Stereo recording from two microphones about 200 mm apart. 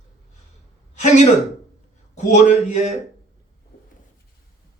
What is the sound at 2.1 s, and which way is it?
Speech, 35° left (ahead or behind).